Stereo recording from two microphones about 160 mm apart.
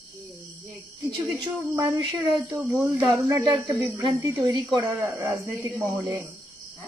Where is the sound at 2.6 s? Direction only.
15° right (ahead or behind).